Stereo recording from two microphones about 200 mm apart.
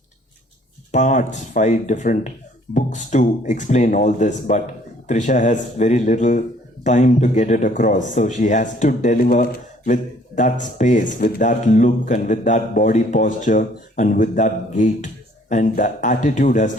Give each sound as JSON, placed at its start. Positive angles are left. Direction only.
{"t": 0.9, "sound": "speech", "side_deg": 40}